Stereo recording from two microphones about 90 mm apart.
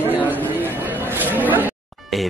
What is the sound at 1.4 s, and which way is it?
Speech, 20° right (ahead or behind).